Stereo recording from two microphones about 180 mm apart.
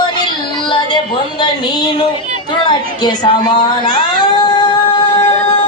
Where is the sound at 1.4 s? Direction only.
25° left (ahead or behind).